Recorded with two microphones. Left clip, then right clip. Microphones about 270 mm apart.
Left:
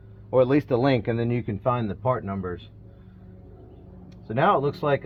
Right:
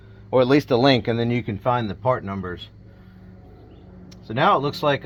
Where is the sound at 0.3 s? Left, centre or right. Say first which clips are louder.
Right 3 dB; right.